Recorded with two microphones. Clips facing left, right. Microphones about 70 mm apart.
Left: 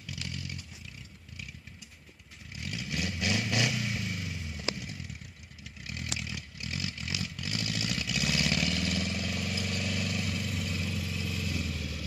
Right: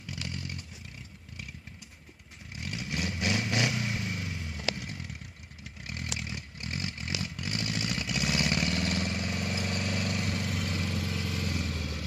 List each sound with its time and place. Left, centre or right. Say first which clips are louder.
0.0 s vehicle: right 2 dB; right
2.5 s vehicle: right 1 dB; right
5.6 s chainsaw: right 1 dB; right
6.1 s vehicle: right 1 dB; right